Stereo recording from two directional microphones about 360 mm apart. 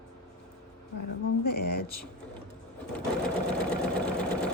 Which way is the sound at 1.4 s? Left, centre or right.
Left.